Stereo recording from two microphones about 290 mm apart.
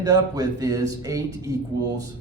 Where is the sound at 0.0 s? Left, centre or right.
Centre.